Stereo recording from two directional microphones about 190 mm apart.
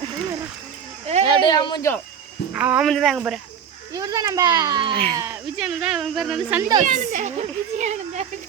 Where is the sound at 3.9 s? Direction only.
20° right (ahead or behind).